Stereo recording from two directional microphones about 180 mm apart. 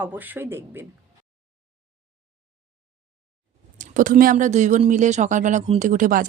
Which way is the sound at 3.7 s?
45° right (ahead or behind).